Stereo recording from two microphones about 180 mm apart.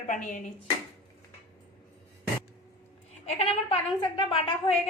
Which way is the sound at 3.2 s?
35° left (ahead or behind).